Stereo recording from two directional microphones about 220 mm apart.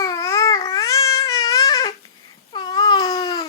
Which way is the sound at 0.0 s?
15° left (ahead or behind).